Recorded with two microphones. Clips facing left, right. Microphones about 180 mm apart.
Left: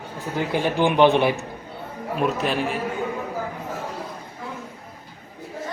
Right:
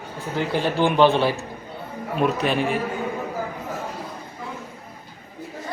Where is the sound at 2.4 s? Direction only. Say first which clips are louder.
Right 2 dB; centre (ahead or behind).